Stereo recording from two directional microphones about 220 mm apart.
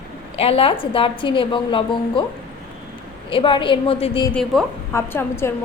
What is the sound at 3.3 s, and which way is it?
A woman's voice, 25° left (ahead or behind).